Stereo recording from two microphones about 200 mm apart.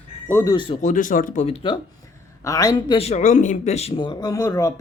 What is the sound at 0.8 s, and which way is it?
Speech, 40° left (ahead or behind).